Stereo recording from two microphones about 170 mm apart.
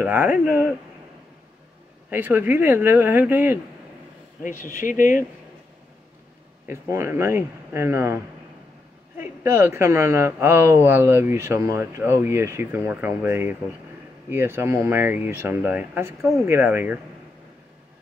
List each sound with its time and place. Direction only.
0.0 s speech: 10° right (ahead or behind)
2.0 s speech: 10° right (ahead or behind)
4.7 s speech: 50° left (ahead or behind)
6.7 s speech: 15° right (ahead or behind)